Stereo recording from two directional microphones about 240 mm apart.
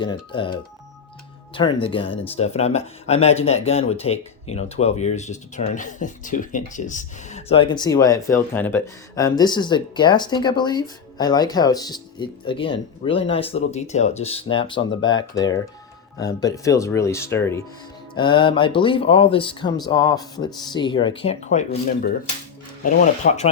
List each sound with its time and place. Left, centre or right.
0.0 s speech: left